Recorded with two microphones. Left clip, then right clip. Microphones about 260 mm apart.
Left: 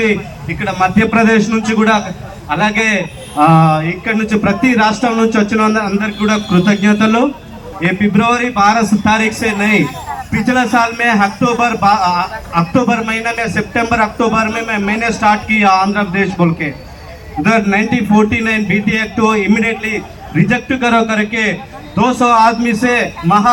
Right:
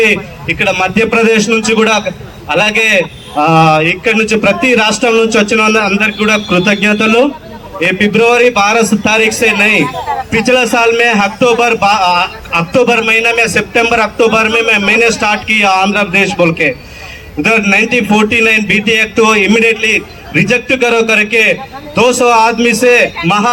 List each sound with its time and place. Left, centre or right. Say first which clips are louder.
0.6 s a man's voice: right 2 dB; right